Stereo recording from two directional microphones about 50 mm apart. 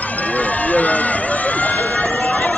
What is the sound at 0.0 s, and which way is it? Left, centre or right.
Run, left.